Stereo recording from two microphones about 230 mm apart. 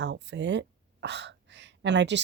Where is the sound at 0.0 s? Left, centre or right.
Right.